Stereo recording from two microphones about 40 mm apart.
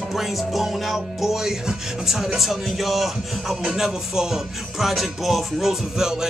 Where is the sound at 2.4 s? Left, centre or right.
Centre.